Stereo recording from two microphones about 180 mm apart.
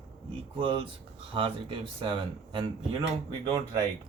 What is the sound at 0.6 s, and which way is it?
Speech, 30° right (ahead or behind).